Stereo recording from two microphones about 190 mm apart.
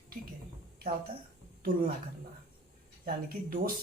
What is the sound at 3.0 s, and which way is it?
Speech, 50° right (ahead or behind).